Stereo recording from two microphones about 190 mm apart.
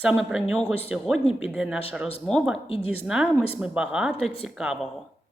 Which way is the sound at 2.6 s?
30° left (ahead or behind).